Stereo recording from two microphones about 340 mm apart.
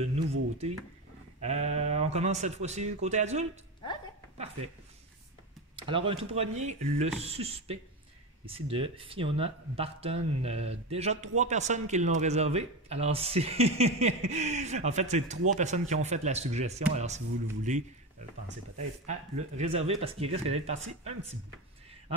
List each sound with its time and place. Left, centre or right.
0.0 s speech: centre
5.8 s speech: centre
19.0 s speech: centre